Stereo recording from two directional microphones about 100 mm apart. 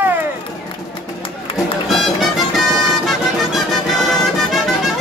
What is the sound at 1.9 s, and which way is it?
Music, centre (ahead or behind).